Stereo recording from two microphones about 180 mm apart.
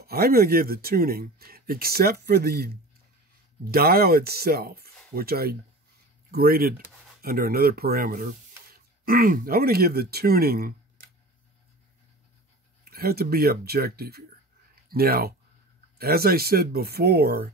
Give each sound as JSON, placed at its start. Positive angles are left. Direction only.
{"t": 0.0, "sound": "speech", "side_deg": -60}
{"t": 12.9, "sound": "speech", "side_deg": -55}